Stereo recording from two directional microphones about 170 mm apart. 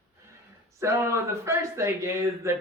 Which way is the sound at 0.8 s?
15° right (ahead or behind).